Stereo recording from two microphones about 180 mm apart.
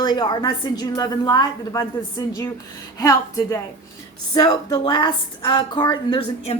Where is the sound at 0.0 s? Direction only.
25° left (ahead or behind).